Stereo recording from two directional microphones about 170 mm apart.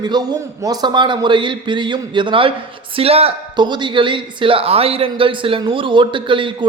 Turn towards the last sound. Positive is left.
turn(degrees=-30)  # may be behind; listen again after turning